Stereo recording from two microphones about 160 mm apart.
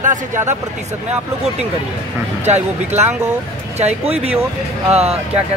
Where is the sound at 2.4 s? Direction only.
45° right (ahead or behind).